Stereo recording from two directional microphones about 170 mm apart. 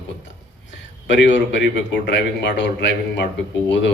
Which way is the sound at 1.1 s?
90° left.